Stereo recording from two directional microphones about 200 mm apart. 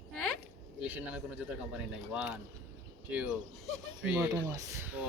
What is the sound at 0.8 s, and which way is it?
A woman's voice, 5° right (ahead or behind).